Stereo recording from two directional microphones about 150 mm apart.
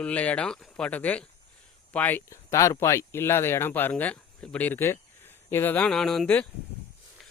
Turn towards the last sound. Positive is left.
turn(degrees=5)  # may be behind; listen again after turning